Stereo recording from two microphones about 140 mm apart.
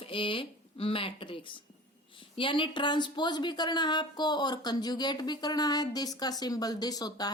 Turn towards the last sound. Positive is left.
turn(degrees=30)  # may be behind; listen again after turning